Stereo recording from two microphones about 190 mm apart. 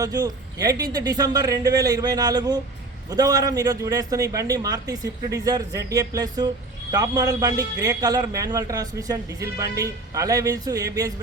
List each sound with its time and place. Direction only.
0.0 s a man's voice: 20° right (ahead or behind)